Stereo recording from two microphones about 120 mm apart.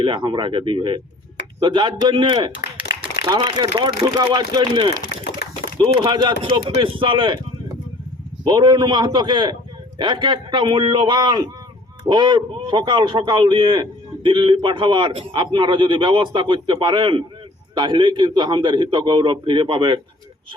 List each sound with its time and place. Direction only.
0.0 s a man's voice: 40° right (ahead or behind)
8.4 s a man's voice: 40° right (ahead or behind)